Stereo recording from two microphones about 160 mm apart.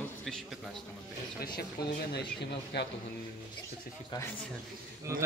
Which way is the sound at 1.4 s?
75° left (ahead or behind).